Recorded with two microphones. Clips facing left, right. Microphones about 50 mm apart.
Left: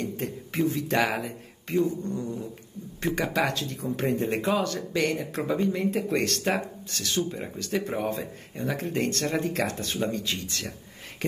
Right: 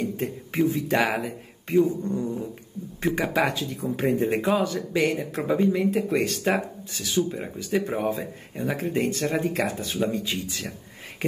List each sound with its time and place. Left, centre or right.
0.0 s speech: centre
1.9 s cat: centre
3.0 s speech: centre